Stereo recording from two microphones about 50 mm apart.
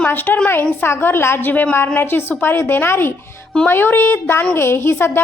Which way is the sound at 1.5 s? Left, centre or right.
Left.